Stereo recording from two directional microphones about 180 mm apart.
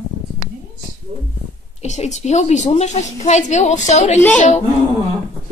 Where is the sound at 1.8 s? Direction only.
40° left (ahead or behind).